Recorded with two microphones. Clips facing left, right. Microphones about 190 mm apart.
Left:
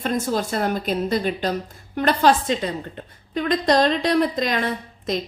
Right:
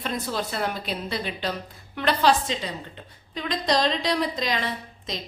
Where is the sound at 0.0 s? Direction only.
45° left (ahead or behind).